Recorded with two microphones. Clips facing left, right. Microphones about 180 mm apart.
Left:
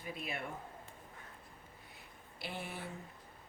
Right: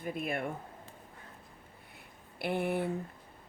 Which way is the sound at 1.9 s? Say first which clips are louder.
Right 4 dB; 60° right (ahead or behind).